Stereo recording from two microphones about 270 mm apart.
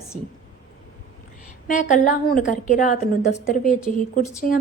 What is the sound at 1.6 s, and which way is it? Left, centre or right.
Speech, left.